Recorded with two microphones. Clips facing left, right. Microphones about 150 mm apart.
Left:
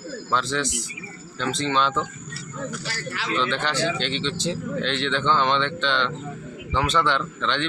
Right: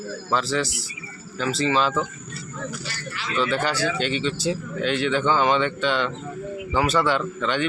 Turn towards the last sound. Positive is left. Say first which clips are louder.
# right 2 dB
turn(degrees=-10)  # may be behind; listen again after turning